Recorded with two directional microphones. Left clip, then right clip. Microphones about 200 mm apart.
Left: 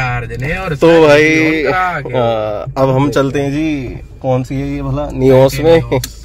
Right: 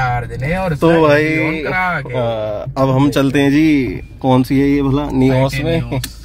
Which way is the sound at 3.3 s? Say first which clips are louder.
Right 4 dB; 20° right (ahead or behind).